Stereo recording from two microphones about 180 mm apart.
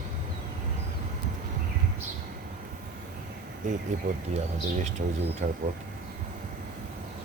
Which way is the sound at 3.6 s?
45° right (ahead or behind).